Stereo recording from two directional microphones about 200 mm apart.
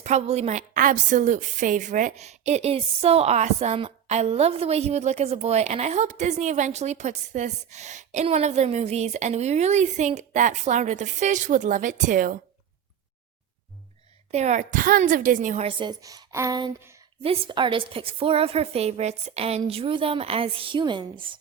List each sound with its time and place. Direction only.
0.0 s a woman's voice: 35° right (ahead or behind)
14.3 s a woman's voice: 35° right (ahead or behind)